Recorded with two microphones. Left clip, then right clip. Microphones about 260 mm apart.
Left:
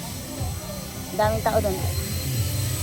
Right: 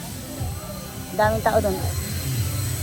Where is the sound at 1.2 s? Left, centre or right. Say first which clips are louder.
Right 2 dB; centre.